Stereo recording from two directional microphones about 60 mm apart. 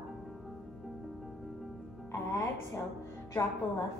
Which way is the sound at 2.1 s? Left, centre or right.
Left.